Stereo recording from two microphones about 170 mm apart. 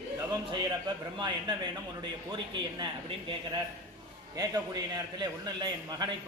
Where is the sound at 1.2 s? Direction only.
25° right (ahead or behind).